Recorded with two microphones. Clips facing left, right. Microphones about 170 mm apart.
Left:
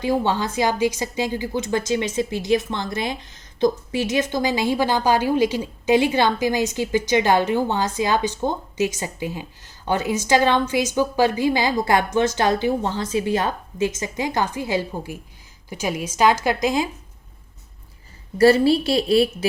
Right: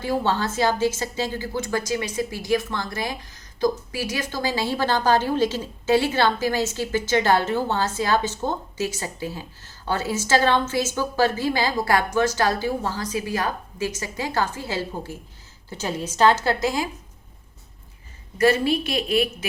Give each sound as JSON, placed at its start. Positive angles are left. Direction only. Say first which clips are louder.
{"t": 0.0, "sound": "a woman's voice", "louder": "left 2 dB", "side_deg": 15}
{"t": 18.3, "sound": "a woman's voice", "louder": "left 5 dB", "side_deg": 30}